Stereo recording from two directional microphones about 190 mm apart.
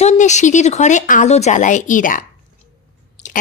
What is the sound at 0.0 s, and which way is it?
A woman's voice, 40° left (ahead or behind).